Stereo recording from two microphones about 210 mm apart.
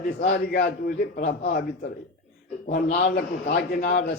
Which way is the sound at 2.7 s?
45° left (ahead or behind).